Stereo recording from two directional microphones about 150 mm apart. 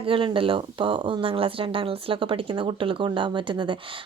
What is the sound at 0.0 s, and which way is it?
Speech, 35° right (ahead or behind).